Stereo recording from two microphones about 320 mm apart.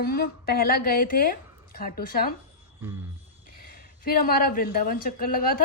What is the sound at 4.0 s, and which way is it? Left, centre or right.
A woman's voice, left.